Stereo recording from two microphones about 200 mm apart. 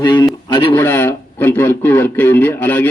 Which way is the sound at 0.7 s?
10° left (ahead or behind).